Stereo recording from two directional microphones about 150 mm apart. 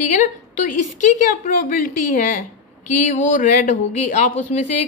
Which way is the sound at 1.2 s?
65° left (ahead or behind).